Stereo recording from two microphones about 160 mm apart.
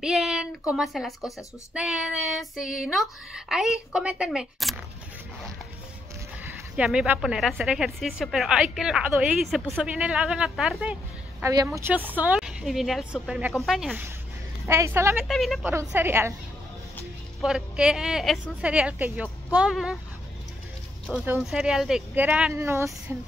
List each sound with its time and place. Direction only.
0.0 s speech: centre (ahead or behind)
6.8 s speech: 5° right (ahead or behind)
11.4 s speech: 20° right (ahead or behind); by 13.9 s centre (ahead or behind)
14.7 s a woman's voice: 15° right (ahead or behind)
15.2 s speech: centre (ahead or behind)
15.6 s a woman's voice: 15° right (ahead or behind)
17.4 s speech: 5° right (ahead or behind)
21.2 s a woman's voice: 5° right (ahead or behind)